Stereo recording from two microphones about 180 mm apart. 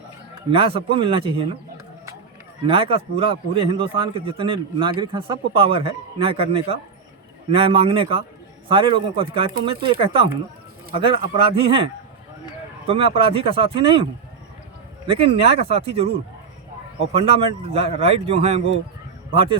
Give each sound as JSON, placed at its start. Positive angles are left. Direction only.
{"t": 0.5, "sound": "speech", "side_deg": -30}
{"t": 2.6, "sound": "a man's voice", "side_deg": -30}
{"t": 12.9, "sound": "a man's voice", "side_deg": -30}